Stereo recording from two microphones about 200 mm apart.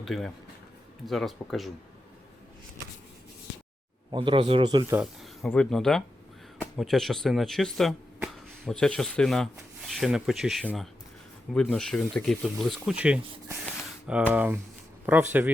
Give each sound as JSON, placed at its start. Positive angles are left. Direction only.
{"t": 0.0, "sound": "speech", "side_deg": 0}
{"t": 4.1, "sound": "speech", "side_deg": -25}
{"t": 4.9, "sound": "snake", "side_deg": 0}
{"t": 5.5, "sound": "speech", "side_deg": 5}